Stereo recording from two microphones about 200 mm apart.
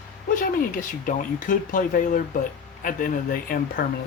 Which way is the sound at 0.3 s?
40° left (ahead or behind).